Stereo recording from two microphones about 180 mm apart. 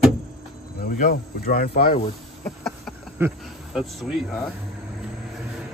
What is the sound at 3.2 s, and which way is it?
Speech, 15° right (ahead or behind).